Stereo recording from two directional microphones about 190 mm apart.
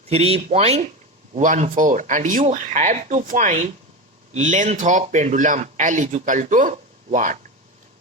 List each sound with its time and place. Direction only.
0.1 s speech: 35° right (ahead or behind)